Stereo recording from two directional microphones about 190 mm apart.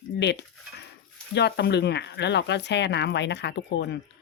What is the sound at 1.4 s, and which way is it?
Speech, 60° left (ahead or behind).